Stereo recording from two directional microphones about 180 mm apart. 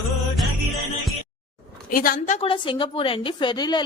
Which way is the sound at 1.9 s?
50° left (ahead or behind).